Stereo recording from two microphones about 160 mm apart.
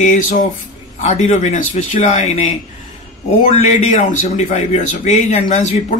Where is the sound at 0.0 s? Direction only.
50° left (ahead or behind).